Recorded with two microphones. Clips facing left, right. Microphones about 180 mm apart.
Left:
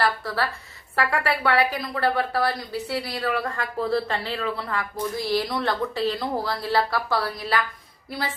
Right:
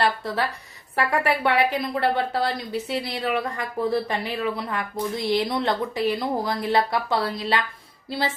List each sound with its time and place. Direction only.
0.0 s a woman's voice: 20° right (ahead or behind)